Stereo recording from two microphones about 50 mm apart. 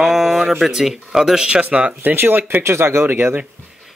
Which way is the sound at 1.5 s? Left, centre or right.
Right.